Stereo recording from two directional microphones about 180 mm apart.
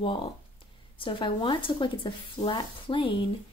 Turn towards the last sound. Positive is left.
turn(degrees=30)  # may be behind; listen again after turning